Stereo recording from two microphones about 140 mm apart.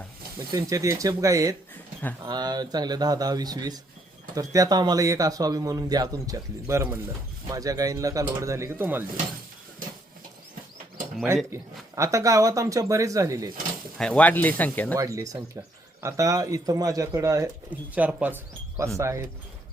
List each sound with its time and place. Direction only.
0.3 s speech: 20° right (ahead or behind)
11.5 s speech: 20° right (ahead or behind)
14.0 s speech: 5° left (ahead or behind)
14.9 s speech: 25° right (ahead or behind)
17.7 s speech: 10° right (ahead or behind)